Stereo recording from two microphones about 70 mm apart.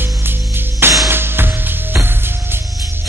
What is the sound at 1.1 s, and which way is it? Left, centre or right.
Music, right.